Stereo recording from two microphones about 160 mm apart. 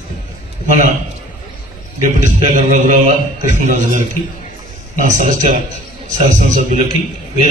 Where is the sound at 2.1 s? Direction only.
50° right (ahead or behind).